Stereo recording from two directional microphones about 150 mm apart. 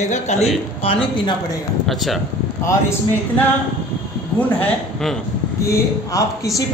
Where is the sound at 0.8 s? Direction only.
35° left (ahead or behind).